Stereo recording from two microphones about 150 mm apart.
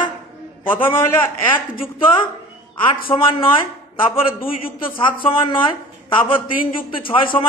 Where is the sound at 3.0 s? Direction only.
35° left (ahead or behind).